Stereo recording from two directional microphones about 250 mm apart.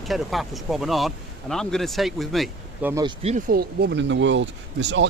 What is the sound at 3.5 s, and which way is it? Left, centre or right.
Speech, right.